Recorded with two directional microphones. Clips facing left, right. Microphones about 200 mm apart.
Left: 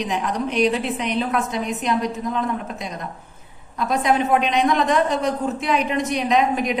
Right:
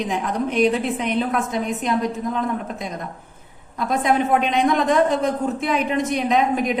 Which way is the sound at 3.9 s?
50° right (ahead or behind).